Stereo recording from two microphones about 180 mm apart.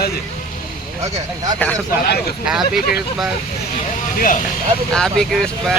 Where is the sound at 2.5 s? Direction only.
Centre (ahead or behind).